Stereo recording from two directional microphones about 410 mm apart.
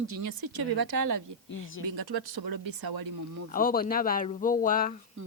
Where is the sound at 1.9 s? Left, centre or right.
Right.